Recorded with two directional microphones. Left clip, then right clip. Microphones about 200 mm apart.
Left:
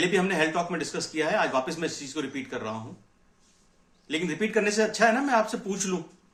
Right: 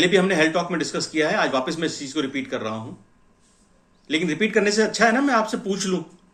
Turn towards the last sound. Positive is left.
turn(degrees=15)  # may be behind; listen again after turning